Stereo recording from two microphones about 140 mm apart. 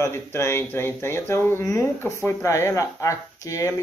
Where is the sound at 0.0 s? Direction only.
20° left (ahead or behind).